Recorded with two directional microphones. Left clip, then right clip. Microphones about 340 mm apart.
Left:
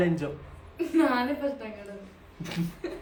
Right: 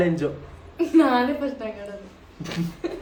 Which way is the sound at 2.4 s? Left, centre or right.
Centre.